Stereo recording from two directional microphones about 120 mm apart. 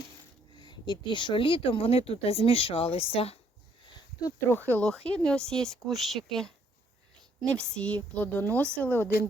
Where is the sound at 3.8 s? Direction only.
40° left (ahead or behind).